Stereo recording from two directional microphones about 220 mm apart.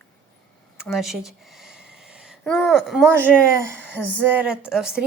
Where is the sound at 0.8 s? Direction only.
Centre (ahead or behind).